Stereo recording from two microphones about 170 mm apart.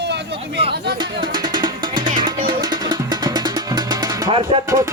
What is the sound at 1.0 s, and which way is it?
Music, 25° right (ahead or behind).